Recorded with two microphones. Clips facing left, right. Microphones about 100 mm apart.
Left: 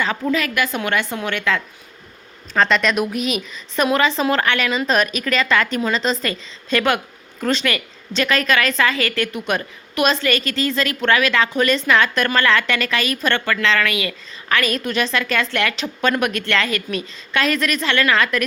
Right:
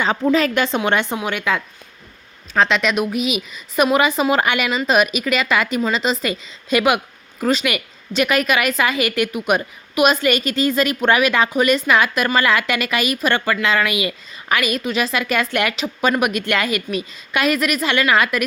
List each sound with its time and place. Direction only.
0.0 s a woman's voice: 25° right (ahead or behind)
2.5 s a woman's voice: centre (ahead or behind)